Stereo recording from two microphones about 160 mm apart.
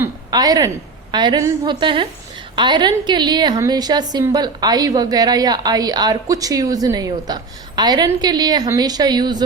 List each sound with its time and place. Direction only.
0.3 s a woman's voice: 25° right (ahead or behind)